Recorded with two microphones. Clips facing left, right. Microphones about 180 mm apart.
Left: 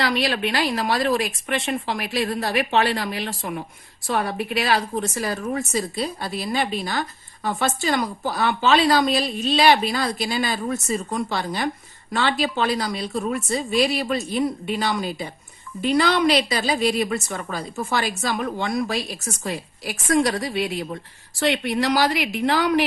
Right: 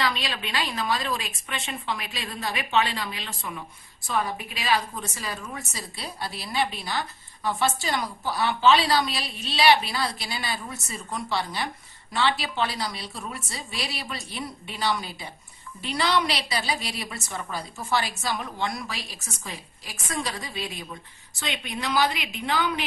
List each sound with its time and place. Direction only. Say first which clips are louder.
0.0 s a woman's voice: left 7 dB; 65° left (ahead or behind)
1.0 s a woman's voice: left 9 dB; 55° left (ahead or behind)
5.5 s a woman's voice: left 12 dB; 55° left (ahead or behind)
19.4 s a woman's voice: left 12 dB; 75° left (ahead or behind)